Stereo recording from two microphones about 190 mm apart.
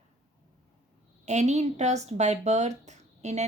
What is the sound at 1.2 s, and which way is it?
A woman's voice, 35° right (ahead or behind).